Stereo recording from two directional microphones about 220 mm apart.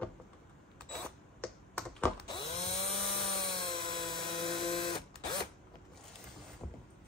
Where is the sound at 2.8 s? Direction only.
25° left (ahead or behind).